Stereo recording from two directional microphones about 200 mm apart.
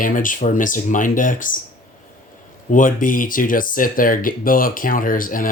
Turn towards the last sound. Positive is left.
turn(degrees=45)  # may be behind; listen again after turning